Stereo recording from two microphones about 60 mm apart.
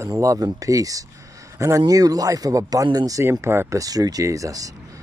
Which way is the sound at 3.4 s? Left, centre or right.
Right.